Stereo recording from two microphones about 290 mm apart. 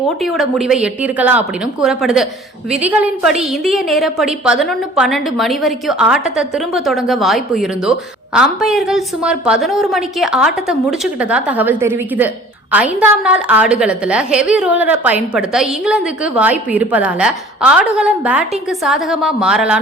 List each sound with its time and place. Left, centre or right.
0.2 s a woman's voice: centre